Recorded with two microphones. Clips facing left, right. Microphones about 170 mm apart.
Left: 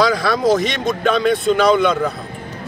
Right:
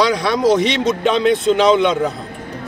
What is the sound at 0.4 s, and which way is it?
Speech, 75° right (ahead or behind).